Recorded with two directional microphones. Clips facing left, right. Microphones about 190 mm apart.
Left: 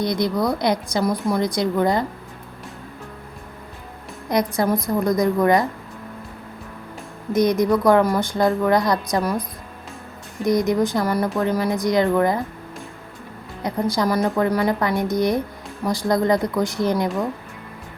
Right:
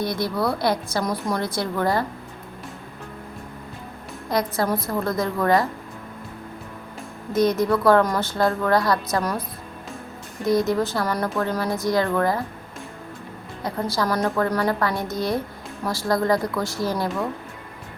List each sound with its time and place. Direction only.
0.0 s a woman's voice: 15° left (ahead or behind)
4.3 s a woman's voice: 15° left (ahead or behind)
7.3 s a woman's voice: 15° left (ahead or behind)
10.4 s a woman's voice: 15° left (ahead or behind)
13.6 s a woman's voice: 20° left (ahead or behind)